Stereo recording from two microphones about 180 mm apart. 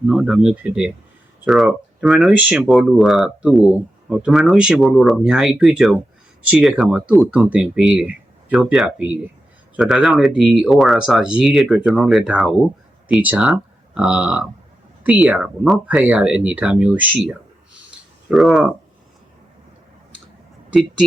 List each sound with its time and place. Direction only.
0.1 s speech: 5° right (ahead or behind)